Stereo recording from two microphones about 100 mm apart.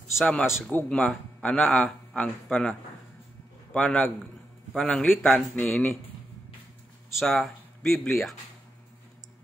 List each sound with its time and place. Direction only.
0.2 s a man's voice: 10° left (ahead or behind)
3.7 s a man's voice: 10° left (ahead or behind)
5.1 s speech: 15° left (ahead or behind)
7.2 s speech: centre (ahead or behind)